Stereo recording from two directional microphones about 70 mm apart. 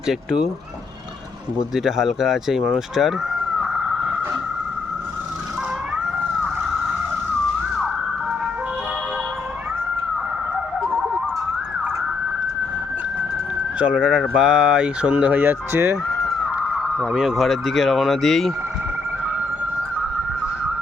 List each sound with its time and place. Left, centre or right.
1.7 s speech: centre
3.6 s vehicle: centre
13.7 s speech: centre
15.1 s speech: right
16.2 s a sound: centre
17.1 s speech: centre